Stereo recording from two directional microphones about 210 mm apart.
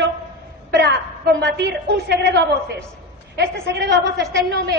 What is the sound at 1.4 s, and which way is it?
A woman's voice, 55° right (ahead or behind).